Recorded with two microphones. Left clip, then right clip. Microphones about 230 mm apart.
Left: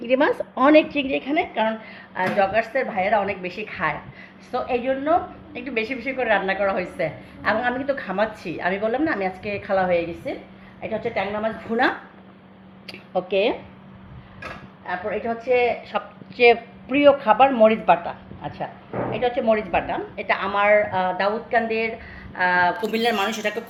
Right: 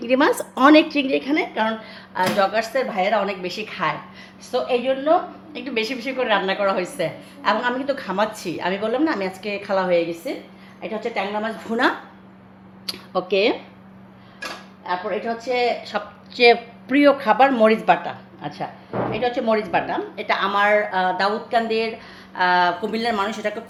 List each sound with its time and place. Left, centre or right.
0.0 s a woman's voice: right
2.1 s a woman's voice: right
13.1 s a woman's voice: right
15.3 s a woman's voice: right; by 23.6 s centre